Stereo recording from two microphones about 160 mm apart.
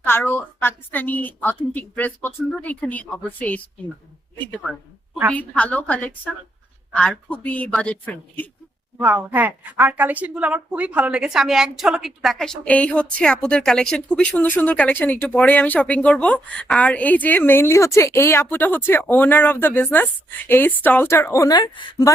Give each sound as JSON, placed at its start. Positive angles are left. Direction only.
{"t": 0.0, "sound": "a woman's voice", "side_deg": 15}
{"t": 5.3, "sound": "a woman's voice", "side_deg": 10}
{"t": 9.0, "sound": "a woman's voice", "side_deg": -10}